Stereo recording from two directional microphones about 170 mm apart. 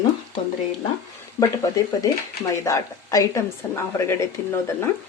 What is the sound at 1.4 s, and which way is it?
A woman's voice, 20° left (ahead or behind).